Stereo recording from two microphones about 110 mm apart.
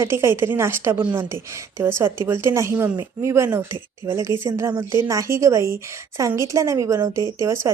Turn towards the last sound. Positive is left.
turn(degrees=-25)  # may be behind; listen again after turning